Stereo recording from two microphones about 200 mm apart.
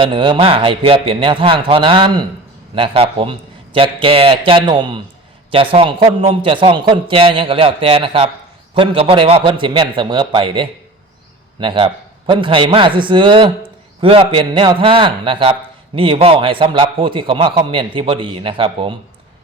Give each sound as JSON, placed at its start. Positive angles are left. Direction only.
{"t": 0.0, "sound": "a man's voice", "side_deg": -25}